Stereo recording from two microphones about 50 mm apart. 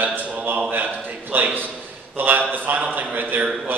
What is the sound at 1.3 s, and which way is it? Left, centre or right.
A man's voice, right.